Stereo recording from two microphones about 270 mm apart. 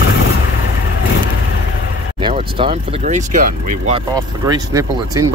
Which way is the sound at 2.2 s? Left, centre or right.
Centre.